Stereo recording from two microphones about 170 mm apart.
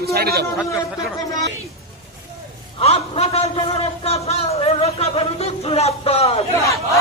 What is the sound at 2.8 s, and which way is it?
Speech, 35° left (ahead or behind).